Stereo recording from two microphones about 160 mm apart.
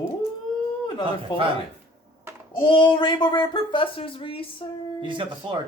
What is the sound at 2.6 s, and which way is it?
Speech, 30° left (ahead or behind).